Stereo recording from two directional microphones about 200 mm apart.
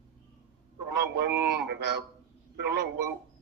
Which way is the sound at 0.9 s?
55° right (ahead or behind).